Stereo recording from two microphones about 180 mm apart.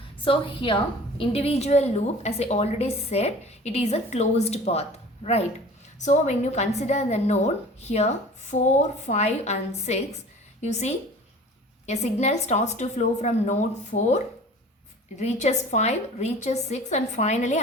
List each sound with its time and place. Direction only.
0.3 s a woman's voice: 30° left (ahead or behind)